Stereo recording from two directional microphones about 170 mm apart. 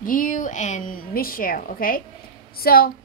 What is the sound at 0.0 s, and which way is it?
A woman's voice, 50° left (ahead or behind).